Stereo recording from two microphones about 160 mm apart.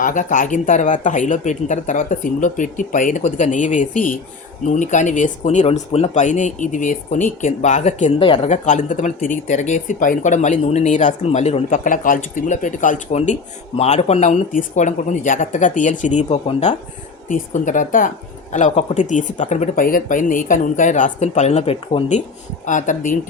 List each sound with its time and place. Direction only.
0.0 s speech: 55° left (ahead or behind)
8.2 s speech: 30° left (ahead or behind)
8.4 s speech: 50° left (ahead or behind)
22.6 s speech: 50° left (ahead or behind)